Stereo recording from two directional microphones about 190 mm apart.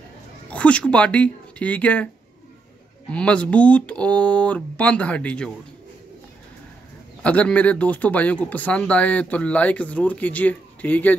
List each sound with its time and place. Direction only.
0.5 s speech: 5° left (ahead or behind)
3.1 s speech: 5° left (ahead or behind)
7.2 s speech: 5° left (ahead or behind)